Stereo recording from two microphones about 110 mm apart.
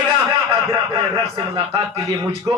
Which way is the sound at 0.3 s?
35° right (ahead or behind).